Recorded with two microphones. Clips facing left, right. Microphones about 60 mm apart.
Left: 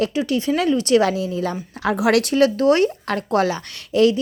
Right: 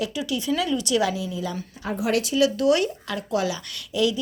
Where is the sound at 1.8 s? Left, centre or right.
Left.